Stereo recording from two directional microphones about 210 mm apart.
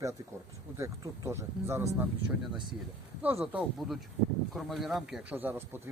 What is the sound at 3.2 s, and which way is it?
A man's voice, 5° right (ahead or behind).